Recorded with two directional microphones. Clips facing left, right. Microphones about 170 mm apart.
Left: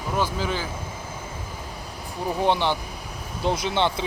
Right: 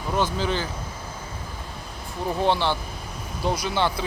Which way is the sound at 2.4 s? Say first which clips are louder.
Even; 15° left (ahead or behind).